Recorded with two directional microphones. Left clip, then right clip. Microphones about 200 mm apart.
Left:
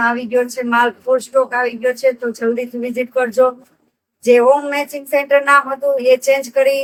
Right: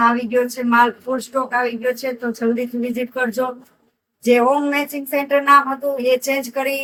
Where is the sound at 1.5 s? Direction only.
35° left (ahead or behind).